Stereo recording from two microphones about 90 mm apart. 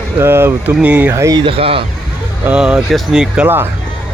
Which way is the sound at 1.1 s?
30° right (ahead or behind).